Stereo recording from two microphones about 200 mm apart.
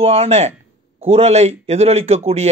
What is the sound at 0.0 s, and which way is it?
A man's voice, 30° right (ahead or behind).